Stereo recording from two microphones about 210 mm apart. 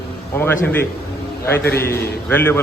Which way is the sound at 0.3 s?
10° left (ahead or behind).